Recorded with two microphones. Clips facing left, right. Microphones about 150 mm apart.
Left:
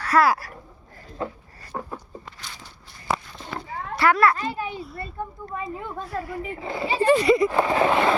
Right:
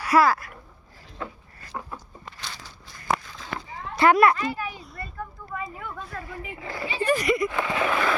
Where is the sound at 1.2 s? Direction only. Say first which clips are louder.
Left 5 dB; 30° left (ahead or behind).